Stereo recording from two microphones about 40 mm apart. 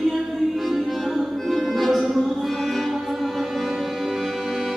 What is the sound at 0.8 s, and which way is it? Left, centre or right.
Music, centre.